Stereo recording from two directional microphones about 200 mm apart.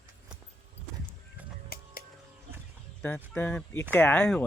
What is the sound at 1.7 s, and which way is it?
Music, 50° left (ahead or behind).